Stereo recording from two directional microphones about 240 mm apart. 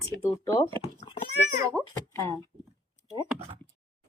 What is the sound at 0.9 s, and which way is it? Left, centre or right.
Cat, left.